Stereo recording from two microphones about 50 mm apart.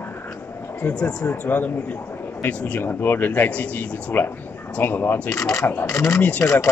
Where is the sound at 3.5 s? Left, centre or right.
Left.